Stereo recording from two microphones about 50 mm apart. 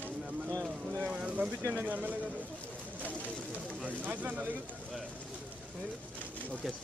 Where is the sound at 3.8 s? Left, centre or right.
Right.